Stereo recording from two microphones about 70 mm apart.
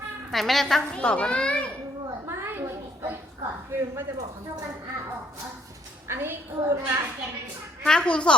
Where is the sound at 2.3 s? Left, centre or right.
Right.